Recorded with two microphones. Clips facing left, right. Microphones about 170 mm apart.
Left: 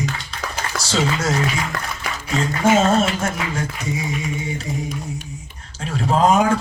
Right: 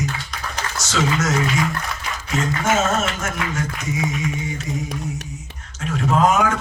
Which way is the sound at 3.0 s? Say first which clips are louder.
Left 4 dB; 30° left (ahead or behind).